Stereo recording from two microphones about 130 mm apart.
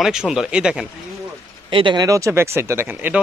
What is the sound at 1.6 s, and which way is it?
Speech, 40° right (ahead or behind).